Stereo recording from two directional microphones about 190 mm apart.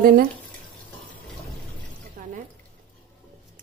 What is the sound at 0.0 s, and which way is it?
Speech, 50° right (ahead or behind).